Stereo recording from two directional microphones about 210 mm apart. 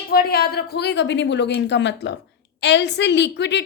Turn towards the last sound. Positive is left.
turn(degrees=55)  # may be behind; listen again after turning